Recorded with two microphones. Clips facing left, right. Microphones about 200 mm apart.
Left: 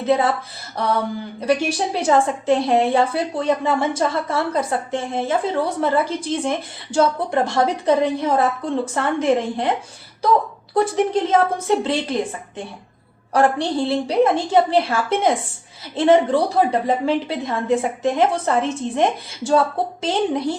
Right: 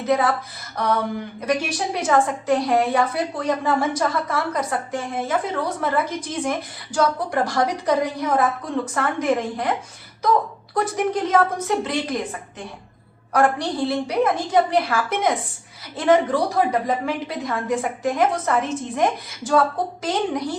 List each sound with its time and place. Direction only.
0.0 s a woman's voice: 25° left (ahead or behind)
10.8 s a woman's voice: 25° left (ahead or behind)
13.3 s a woman's voice: 25° left (ahead or behind)